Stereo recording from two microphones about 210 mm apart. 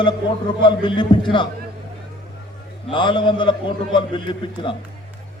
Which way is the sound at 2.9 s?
20° left (ahead or behind).